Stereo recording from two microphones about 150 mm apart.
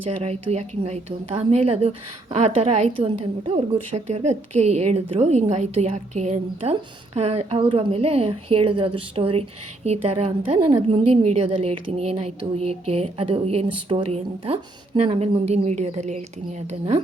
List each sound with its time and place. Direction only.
0.2 s a woman's voice: 45° right (ahead or behind)